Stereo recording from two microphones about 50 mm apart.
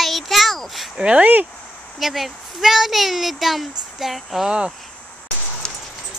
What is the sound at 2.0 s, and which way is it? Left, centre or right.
Speech, centre.